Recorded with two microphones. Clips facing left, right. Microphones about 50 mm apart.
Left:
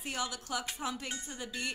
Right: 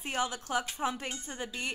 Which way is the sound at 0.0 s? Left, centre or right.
Right.